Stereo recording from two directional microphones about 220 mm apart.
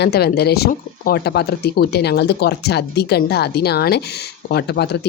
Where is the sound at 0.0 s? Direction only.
45° left (ahead or behind).